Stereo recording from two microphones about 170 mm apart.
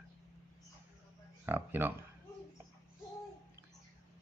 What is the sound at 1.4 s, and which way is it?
Speech, 10° right (ahead or behind).